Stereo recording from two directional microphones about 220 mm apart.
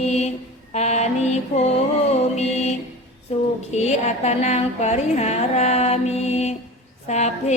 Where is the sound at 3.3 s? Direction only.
30° left (ahead or behind).